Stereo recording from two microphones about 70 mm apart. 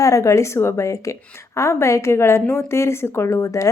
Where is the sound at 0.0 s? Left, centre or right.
Left.